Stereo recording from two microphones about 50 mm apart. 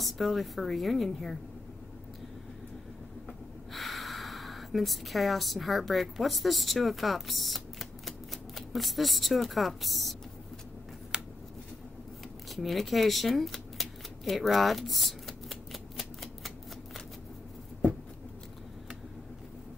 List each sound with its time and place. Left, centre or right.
0.0 s a woman's voice: centre
3.7 s speech: centre
11.1 s scissors: centre
12.4 s shuffling cards: centre